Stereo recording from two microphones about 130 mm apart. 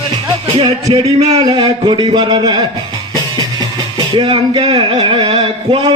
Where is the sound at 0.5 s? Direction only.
45° right (ahead or behind).